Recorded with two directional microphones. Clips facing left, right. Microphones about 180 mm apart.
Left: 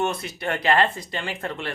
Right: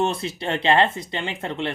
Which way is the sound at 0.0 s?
30° right (ahead or behind).